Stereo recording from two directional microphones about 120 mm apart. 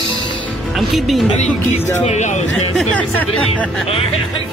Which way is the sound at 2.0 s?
75° left (ahead or behind).